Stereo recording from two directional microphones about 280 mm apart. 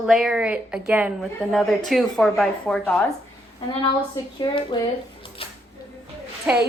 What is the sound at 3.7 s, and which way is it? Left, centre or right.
A woman's voice, centre.